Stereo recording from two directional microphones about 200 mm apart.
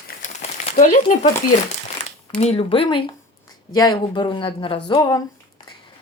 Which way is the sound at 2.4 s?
30° left (ahead or behind).